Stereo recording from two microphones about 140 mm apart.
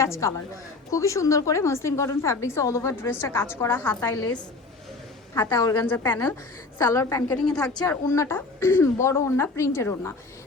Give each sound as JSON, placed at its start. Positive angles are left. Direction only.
{"t": 0.0, "sound": "a woman's voice", "side_deg": 20}